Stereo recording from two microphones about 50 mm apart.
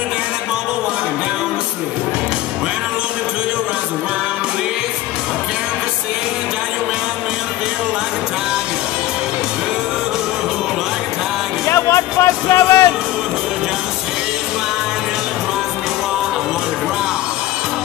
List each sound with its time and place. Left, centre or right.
11.6 s music: left